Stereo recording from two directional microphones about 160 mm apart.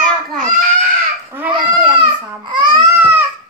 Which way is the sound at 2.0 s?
30° right (ahead or behind).